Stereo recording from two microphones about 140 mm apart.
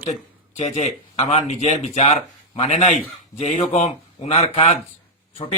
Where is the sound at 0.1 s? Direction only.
55° left (ahead or behind).